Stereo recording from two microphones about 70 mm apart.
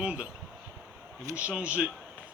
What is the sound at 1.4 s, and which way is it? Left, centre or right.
Speech, centre.